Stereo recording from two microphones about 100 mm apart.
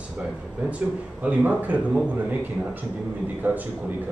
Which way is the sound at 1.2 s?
15° right (ahead or behind).